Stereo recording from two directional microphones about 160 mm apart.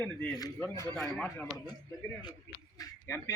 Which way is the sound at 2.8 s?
15° left (ahead or behind).